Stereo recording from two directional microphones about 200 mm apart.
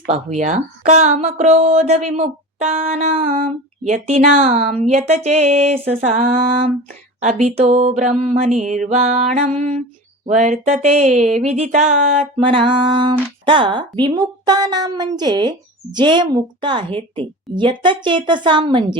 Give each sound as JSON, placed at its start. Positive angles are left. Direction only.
{"t": 0.0, "sound": "speech", "side_deg": -35}
{"t": 12.5, "sound": "speech", "side_deg": -25}